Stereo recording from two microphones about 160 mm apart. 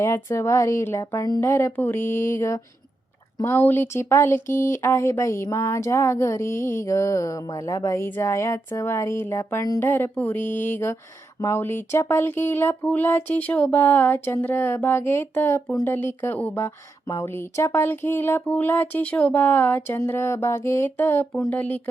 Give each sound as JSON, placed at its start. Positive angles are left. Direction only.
{"t": 0.0, "sound": "speech", "side_deg": 20}